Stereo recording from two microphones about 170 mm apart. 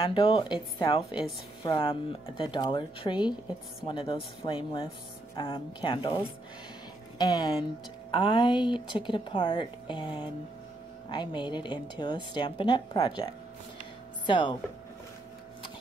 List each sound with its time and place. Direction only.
0.0 s a woman's voice: 30° left (ahead or behind)